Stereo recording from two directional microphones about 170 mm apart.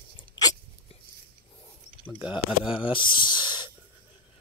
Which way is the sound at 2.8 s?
30° left (ahead or behind).